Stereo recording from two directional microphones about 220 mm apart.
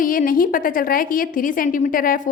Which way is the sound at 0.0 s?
40° left (ahead or behind).